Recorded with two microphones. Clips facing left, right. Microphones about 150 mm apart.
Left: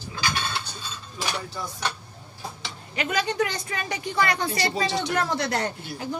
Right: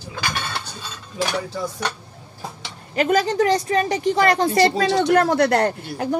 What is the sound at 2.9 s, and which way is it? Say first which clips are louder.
A woman's voice: right 8 dB; 45° right (ahead or behind).